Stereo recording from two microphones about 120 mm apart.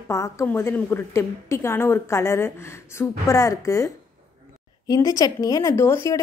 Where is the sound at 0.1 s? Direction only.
25° left (ahead or behind).